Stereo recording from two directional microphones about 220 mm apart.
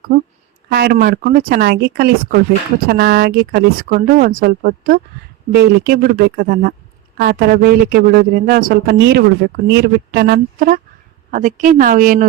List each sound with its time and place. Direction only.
0.7 s speech: 45° right (ahead or behind)